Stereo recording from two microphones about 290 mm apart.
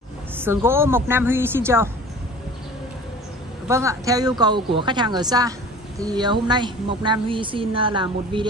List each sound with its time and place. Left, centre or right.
0.4 s a woman's voice: centre
3.6 s a woman's voice: centre